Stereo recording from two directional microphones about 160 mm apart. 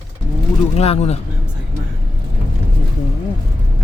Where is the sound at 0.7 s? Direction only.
45° left (ahead or behind).